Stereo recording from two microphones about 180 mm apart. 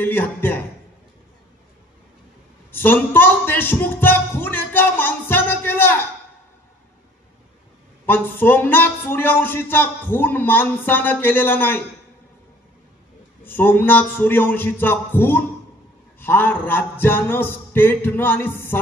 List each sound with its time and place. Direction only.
0.0 s a man's voice: 10° left (ahead or behind)
2.7 s a sound: 10° left (ahead or behind)
8.1 s a man's voice: 10° left (ahead or behind)
13.4 s a man's voice: 10° left (ahead or behind)